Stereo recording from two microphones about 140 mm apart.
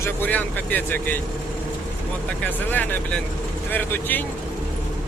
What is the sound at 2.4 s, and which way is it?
Speech, 10° left (ahead or behind).